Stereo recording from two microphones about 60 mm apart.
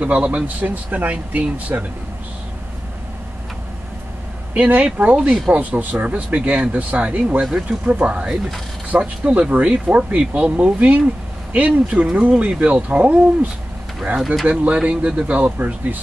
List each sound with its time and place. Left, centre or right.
0.0 s speech: right
4.6 s speech: right
14.4 s speech: right